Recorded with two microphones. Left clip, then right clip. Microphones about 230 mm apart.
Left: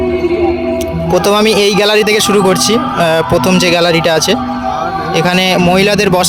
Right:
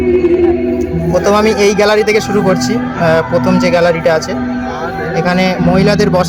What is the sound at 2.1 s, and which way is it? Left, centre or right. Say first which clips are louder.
Speech: left 2 dB; left.